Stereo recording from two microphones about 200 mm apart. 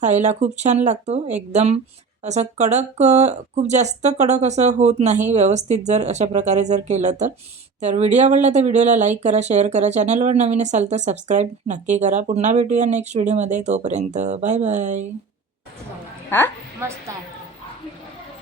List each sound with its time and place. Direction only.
0.0 s speech: 35° right (ahead or behind)
16.3 s a woman's voice: 10° left (ahead or behind)